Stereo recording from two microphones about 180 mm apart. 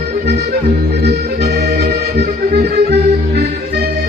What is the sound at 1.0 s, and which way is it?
Accordion, 65° right (ahead or behind).